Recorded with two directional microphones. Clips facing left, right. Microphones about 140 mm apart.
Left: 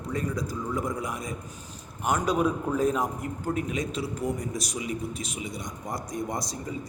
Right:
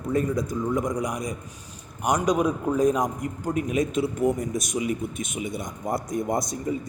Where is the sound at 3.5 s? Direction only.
30° left (ahead or behind).